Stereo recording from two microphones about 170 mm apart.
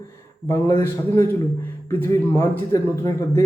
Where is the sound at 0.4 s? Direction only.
15° left (ahead or behind).